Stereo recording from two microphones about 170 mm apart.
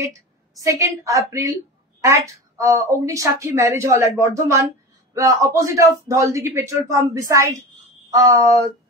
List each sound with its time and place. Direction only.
0.6 s a woman's voice: 20° right (ahead or behind)